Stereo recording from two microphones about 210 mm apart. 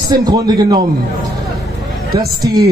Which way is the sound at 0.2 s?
20° right (ahead or behind).